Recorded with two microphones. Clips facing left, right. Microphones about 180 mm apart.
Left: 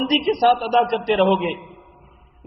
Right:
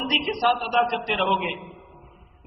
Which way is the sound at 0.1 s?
35° left (ahead or behind).